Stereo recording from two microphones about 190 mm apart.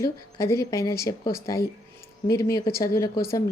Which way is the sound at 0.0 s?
15° left (ahead or behind).